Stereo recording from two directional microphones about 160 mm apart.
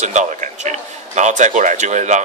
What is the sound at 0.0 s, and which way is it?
A man's voice, 50° right (ahead or behind).